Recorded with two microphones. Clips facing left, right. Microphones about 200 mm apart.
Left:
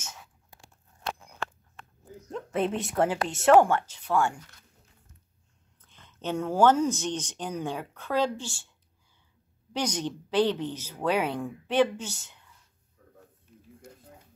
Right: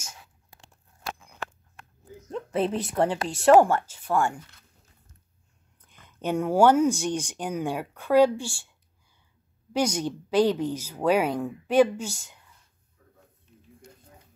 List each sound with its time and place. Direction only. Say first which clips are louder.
2.7 s speech: right 1 dB; centre (ahead or behind)
5.9 s speech: right 4 dB; 10° right (ahead or behind)
9.7 s speech: right 4 dB; 10° right (ahead or behind)